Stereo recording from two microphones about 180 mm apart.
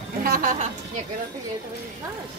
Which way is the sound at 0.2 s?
50° right (ahead or behind).